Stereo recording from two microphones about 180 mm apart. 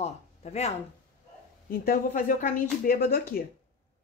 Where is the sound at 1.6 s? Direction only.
55° left (ahead or behind).